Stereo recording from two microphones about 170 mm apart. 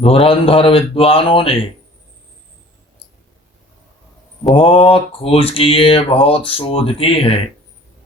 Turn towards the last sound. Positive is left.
turn(degrees=35)  # may be behind; listen again after turning